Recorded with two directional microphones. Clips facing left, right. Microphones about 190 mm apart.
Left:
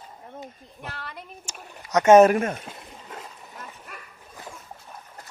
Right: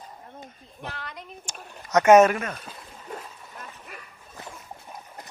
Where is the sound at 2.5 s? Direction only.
25° left (ahead or behind).